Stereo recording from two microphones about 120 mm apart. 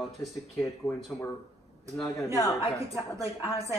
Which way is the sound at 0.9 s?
20° left (ahead or behind).